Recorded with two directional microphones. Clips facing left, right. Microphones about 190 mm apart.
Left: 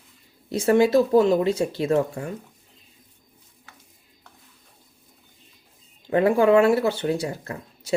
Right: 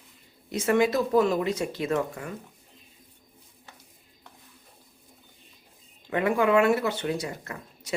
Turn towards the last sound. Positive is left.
turn(degrees=30)  # may be behind; listen again after turning